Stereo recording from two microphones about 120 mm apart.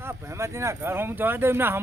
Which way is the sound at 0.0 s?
20° right (ahead or behind).